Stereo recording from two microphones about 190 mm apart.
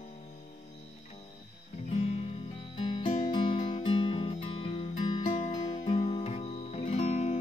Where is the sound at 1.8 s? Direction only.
35° left (ahead or behind).